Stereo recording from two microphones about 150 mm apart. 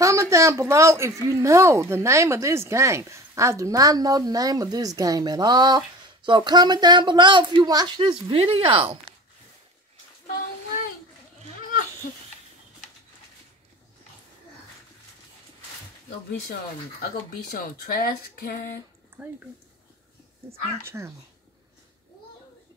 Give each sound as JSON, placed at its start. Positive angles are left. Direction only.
{"t": 0.0, "sound": "a woman's voice", "side_deg": -20}
{"t": 12.0, "sound": "babbling", "side_deg": 65}
{"t": 17.0, "sound": "speech", "side_deg": 70}
{"t": 19.2, "sound": "speech", "side_deg": -10}
{"t": 20.8, "sound": "speech", "side_deg": -15}